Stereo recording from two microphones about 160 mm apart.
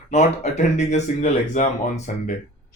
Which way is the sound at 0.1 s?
45° left (ahead or behind).